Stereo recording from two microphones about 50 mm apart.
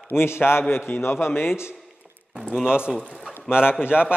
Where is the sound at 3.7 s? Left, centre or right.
Left.